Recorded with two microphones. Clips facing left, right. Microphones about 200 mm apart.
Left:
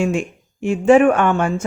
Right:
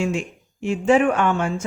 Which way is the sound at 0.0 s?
50° left (ahead or behind).